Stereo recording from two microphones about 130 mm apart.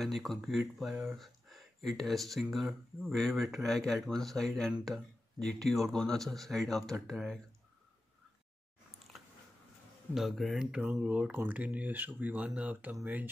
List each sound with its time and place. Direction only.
0.0 s speech: centre (ahead or behind)
10.1 s speech: centre (ahead or behind)